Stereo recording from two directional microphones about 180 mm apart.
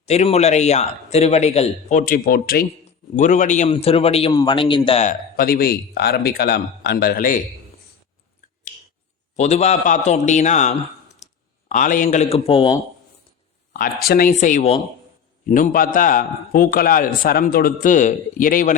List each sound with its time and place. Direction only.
0.0 s a man's voice: 35° left (ahead or behind); by 2.6 s 55° left (ahead or behind)
3.2 s a man's voice: 40° left (ahead or behind); by 4.6 s 25° left (ahead or behind)
4.9 s a man's voice: 35° left (ahead or behind)
5.4 s speech: 55° left (ahead or behind)
9.3 s a man's voice: 40° left (ahead or behind)
13.7 s a man's voice: 55° left (ahead or behind)